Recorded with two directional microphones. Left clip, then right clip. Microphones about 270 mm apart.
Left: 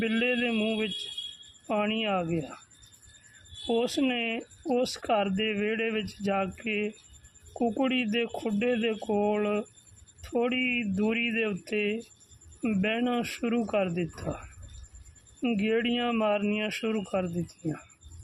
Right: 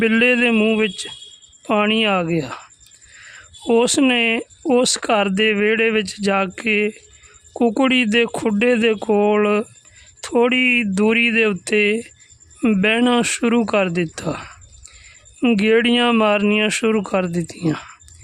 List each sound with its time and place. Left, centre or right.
0.0 s speech: right
3.7 s speech: right